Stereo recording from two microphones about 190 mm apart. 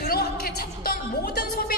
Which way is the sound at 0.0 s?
55° left (ahead or behind).